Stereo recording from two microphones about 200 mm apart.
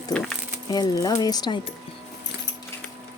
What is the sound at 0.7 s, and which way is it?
Speech, 20° left (ahead or behind).